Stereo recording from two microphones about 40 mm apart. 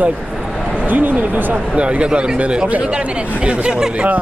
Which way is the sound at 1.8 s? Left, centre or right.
Right.